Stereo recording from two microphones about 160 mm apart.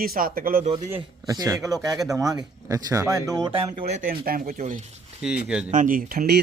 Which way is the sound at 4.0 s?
65° right (ahead or behind).